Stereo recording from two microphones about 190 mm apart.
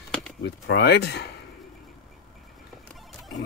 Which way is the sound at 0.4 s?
60° left (ahead or behind).